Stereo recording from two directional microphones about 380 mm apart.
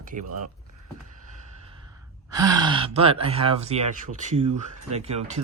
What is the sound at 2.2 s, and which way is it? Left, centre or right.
Speech, centre.